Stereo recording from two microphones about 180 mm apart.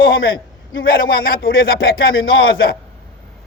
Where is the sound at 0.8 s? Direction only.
55° left (ahead or behind); by 2.6 s 90° left.